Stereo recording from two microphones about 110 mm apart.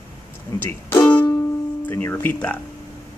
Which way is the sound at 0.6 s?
20° left (ahead or behind).